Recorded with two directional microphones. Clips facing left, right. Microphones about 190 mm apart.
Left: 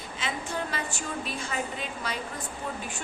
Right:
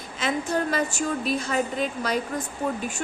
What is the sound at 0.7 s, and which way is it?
Speech, 40° right (ahead or behind).